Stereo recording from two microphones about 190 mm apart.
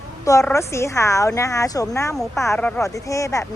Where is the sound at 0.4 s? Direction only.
15° left (ahead or behind).